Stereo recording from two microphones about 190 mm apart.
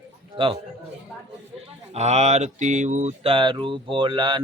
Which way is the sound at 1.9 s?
35° right (ahead or behind).